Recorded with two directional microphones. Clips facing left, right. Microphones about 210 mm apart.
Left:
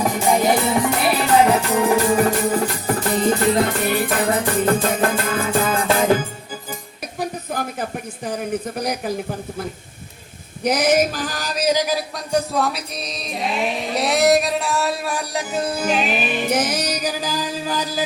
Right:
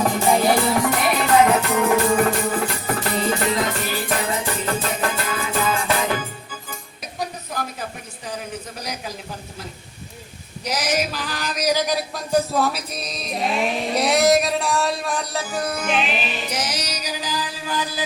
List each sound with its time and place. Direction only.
0.3 s music: 20° left (ahead or behind); by 2.9 s 35° left (ahead or behind)
3.2 s music: 50° left (ahead or behind)
7.5 s speech: 55° left (ahead or behind)
10.6 s music: 55° left (ahead or behind)
11.9 s music: centre (ahead or behind)
15.5 s music: 30° left (ahead or behind)